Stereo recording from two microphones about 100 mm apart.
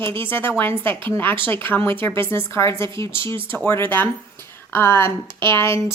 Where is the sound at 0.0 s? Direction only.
25° left (ahead or behind).